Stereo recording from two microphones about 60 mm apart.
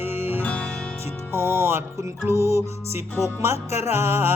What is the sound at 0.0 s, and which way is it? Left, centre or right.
Music, right.